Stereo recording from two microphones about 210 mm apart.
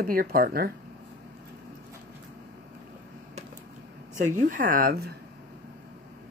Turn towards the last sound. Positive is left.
turn(degrees=-45)  # may be behind; listen again after turning